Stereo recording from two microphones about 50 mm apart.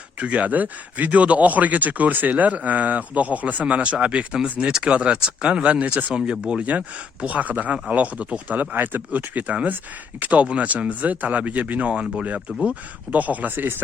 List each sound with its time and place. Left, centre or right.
0.2 s speech: right
6.7 s speech: right
8.7 s speech: right